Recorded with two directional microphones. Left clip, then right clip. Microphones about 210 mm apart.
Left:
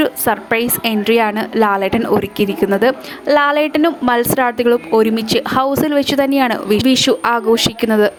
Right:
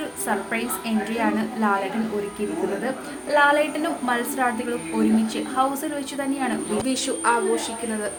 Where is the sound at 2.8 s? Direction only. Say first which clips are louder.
Left 14 dB; 45° left (ahead or behind).